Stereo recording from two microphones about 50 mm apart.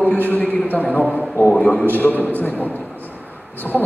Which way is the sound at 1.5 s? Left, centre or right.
Centre.